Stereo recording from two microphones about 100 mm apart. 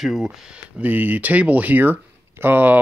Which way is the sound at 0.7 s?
15° right (ahead or behind).